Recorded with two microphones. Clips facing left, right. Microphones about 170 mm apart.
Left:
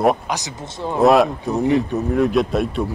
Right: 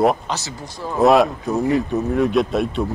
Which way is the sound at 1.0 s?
Centre (ahead or behind).